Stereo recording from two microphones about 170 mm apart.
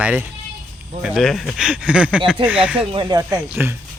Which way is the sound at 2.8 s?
30° right (ahead or behind).